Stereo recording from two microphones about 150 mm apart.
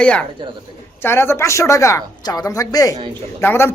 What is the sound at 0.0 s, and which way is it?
A man's voice, 10° left (ahead or behind).